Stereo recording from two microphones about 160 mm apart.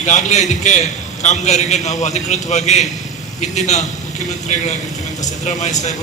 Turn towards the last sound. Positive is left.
turn(degrees=45)  # may be behind; listen again after turning